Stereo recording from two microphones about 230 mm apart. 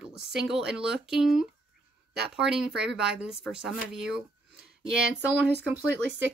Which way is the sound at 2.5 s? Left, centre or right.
Centre.